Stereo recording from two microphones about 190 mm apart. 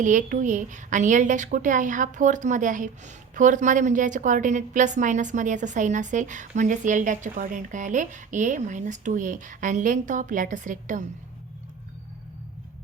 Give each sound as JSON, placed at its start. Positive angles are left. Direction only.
{"t": 0.0, "sound": "a woman's voice", "side_deg": -40}